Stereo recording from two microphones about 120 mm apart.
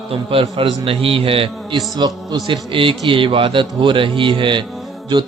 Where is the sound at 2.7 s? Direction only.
45° right (ahead or behind).